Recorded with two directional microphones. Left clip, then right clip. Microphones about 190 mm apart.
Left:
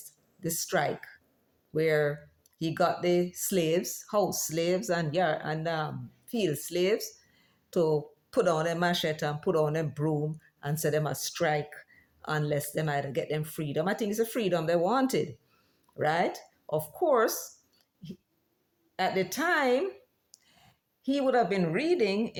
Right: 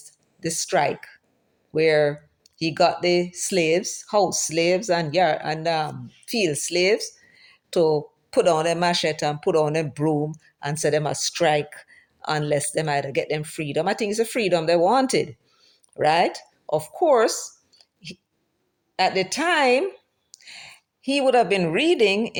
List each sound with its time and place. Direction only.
0.3 s speech: 25° right (ahead or behind)
20.3 s a sound: 25° right (ahead or behind)
21.7 s a woman's voice: 35° right (ahead or behind)